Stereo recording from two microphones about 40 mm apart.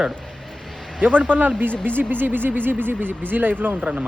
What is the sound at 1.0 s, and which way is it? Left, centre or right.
Speech, right.